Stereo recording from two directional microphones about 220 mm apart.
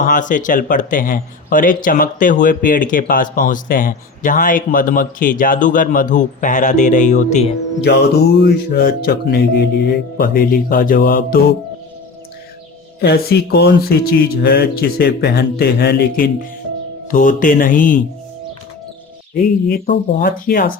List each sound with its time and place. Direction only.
0.0 s speech: 35° left (ahead or behind)
7.8 s speech: 50° left (ahead or behind)
13.0 s speech: 45° left (ahead or behind)
20.2 s speech: 40° left (ahead or behind)